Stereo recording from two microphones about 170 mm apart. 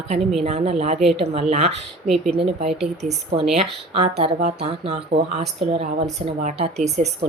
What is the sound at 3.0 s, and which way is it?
Speech, 40° right (ahead or behind).